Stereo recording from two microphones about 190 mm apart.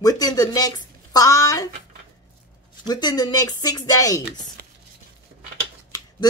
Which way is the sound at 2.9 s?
20° left (ahead or behind).